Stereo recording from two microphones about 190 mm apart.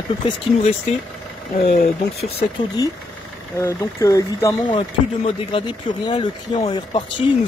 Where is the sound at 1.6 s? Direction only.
50° left (ahead or behind).